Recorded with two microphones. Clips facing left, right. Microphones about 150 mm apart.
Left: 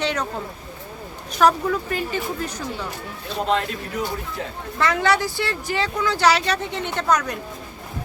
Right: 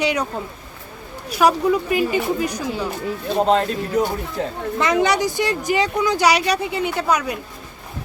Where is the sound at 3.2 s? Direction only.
45° right (ahead or behind).